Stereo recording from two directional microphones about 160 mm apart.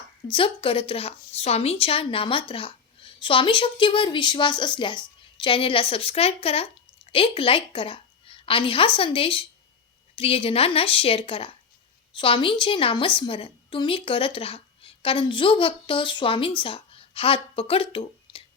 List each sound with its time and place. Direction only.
0.3 s a woman's voice: 35° left (ahead or behind)